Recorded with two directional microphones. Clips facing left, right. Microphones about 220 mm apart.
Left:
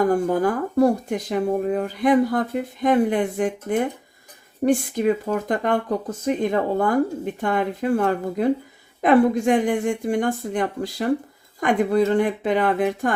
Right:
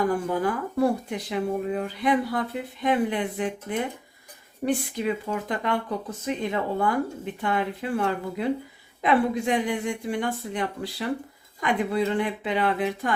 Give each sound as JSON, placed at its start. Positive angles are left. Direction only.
{"t": 0.1, "sound": "speech", "side_deg": 45}